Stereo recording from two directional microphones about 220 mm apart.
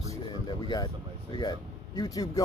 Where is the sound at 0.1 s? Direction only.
20° left (ahead or behind).